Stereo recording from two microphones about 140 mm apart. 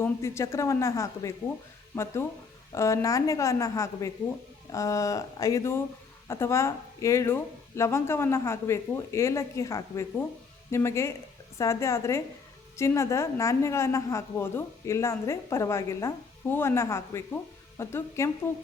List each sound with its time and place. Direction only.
0.0 s a woman's voice: 20° left (ahead or behind)
2.7 s a woman's voice: 20° left (ahead or behind)